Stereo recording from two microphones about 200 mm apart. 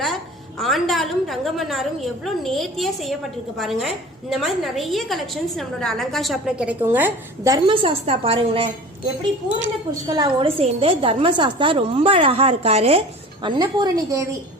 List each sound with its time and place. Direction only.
0.6 s a woman's voice: centre (ahead or behind); by 8.7 s 25° right (ahead or behind)
10.1 s a woman's voice: 25° right (ahead or behind)
13.4 s a woman's voice: 20° right (ahead or behind)